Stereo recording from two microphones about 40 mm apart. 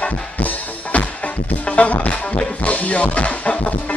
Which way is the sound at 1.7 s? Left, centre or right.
Left.